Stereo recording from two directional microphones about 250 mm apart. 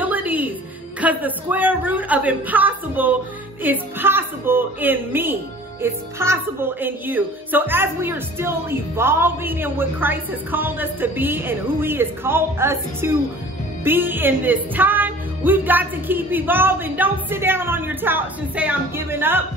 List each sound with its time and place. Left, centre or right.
0.0 s music: centre
1.0 s a woman's voice: centre